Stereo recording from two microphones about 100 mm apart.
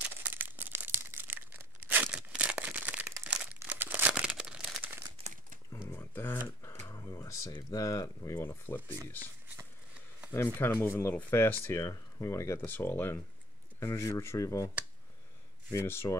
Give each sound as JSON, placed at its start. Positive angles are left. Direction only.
{"t": 0.0, "sound": "crumpling", "side_deg": -20}
{"t": 4.1, "sound": "crumpling", "side_deg": -10}
{"t": 5.2, "sound": "crumpling", "side_deg": -65}
{"t": 5.9, "sound": "a sound", "side_deg": 20}
{"t": 7.7, "sound": "speech", "side_deg": 35}
{"t": 10.3, "sound": "speech", "side_deg": 20}
{"t": 12.5, "sound": "speech", "side_deg": 20}
{"t": 13.7, "sound": "speech", "side_deg": 35}
{"t": 15.7, "sound": "speech", "side_deg": 25}